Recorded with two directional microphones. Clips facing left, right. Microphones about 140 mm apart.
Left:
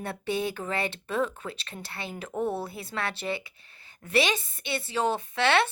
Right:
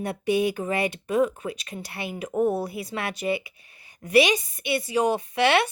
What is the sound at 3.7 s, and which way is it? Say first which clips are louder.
A woman's voice: right 6 dB; 15° right (ahead or behind).